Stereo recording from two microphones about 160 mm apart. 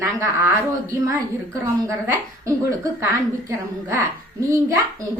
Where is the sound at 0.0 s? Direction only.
15° right (ahead or behind).